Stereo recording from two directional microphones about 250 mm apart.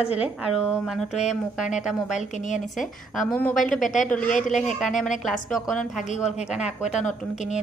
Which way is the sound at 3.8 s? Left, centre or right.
Left.